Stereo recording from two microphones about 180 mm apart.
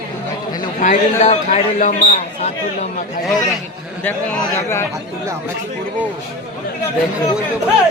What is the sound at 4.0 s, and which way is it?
Speech, 5° left (ahead or behind).